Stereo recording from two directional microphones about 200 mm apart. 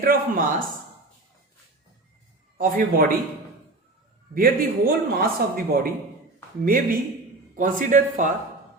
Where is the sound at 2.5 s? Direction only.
45° right (ahead or behind).